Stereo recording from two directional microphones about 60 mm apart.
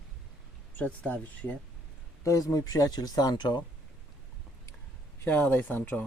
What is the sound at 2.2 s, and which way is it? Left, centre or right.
Speech, left.